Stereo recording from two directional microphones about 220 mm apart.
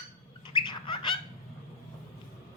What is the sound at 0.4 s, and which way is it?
Bird, 20° left (ahead or behind).